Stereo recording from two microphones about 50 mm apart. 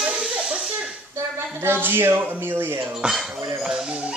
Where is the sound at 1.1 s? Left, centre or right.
Right.